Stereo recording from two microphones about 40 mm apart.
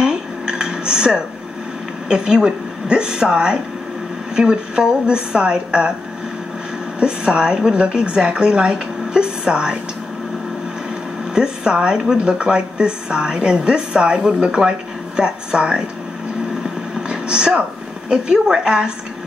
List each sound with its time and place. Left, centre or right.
0.0 s dishes: centre
2.0 s a woman's voice: right
7.0 s a woman's voice: right
11.3 s a woman's voice: centre
17.1 s a sound: centre
18.1 s a woman's voice: centre